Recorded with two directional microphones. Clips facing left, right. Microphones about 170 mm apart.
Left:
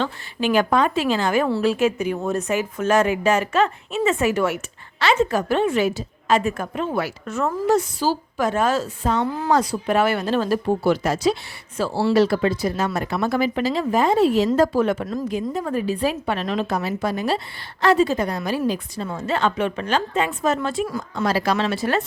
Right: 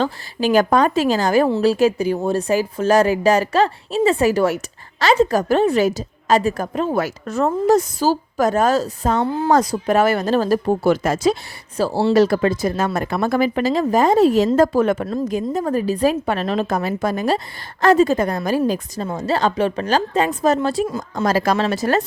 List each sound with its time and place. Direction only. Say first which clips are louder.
0.0 s speech: right 3 dB; 40° right (ahead or behind)
9.2 s speech: right 4 dB; 30° right (ahead or behind)
9.5 s a woman's voice: right 3 dB; 45° right (ahead or behind)
11.8 s a woman's voice: right 3 dB; 35° right (ahead or behind)
20.8 s speech: right 3 dB; 25° right (ahead or behind)
21.2 s a woman's voice: right 3 dB; 45° right (ahead or behind)